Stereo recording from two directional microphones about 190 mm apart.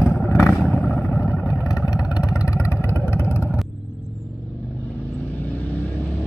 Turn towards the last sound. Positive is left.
turn(degrees=5)  # may be behind; listen again after turning